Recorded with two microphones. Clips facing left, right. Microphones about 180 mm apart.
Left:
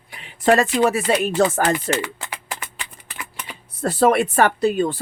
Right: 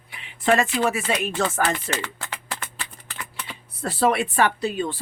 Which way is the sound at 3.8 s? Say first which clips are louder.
Left 5 dB; 45° left (ahead or behind).